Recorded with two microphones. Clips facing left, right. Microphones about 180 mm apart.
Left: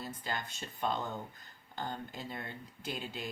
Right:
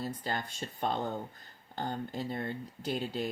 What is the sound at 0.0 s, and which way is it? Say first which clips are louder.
Speech: right 4 dB; 40° right (ahead or behind).